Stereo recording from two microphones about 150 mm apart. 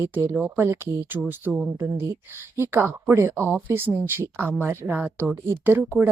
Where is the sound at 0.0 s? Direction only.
20° right (ahead or behind).